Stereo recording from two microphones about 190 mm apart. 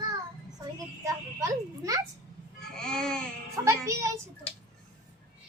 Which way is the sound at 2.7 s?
5° left (ahead or behind).